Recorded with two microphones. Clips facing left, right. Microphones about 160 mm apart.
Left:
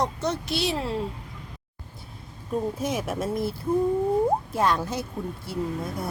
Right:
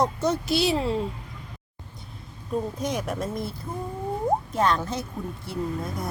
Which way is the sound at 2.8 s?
5° left (ahead or behind).